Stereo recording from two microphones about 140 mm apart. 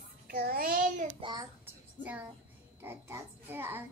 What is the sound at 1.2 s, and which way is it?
Speech, 30° right (ahead or behind).